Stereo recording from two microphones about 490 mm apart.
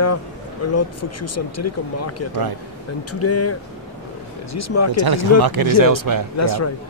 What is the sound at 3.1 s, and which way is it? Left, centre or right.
Speech, left.